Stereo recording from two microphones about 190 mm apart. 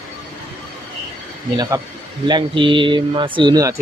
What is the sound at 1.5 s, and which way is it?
Speech, 20° right (ahead or behind).